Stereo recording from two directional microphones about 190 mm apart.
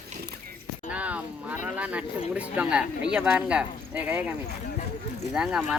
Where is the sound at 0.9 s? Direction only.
5° right (ahead or behind).